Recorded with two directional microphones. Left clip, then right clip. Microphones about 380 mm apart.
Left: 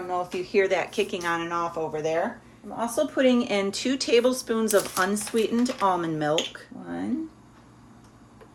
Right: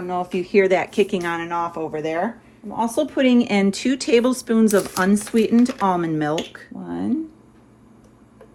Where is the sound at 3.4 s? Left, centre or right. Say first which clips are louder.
Right 5 dB; centre.